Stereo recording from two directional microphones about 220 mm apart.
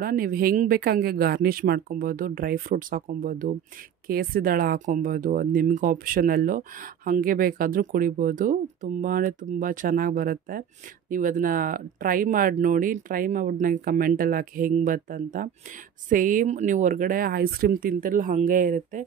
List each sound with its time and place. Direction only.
0.0 s speech: 40° right (ahead or behind)